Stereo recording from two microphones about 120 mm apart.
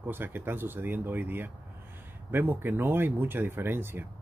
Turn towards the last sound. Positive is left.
turn(degrees=-20)  # may be behind; listen again after turning